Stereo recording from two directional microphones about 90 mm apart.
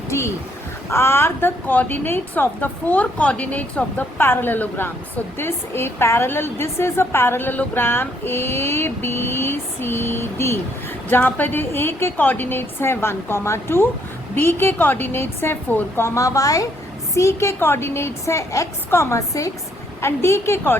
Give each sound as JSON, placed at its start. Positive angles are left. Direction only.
{"t": 0.1, "sound": "a woman's voice", "side_deg": 35}